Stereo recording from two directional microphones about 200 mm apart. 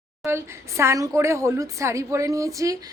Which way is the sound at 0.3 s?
15° right (ahead or behind).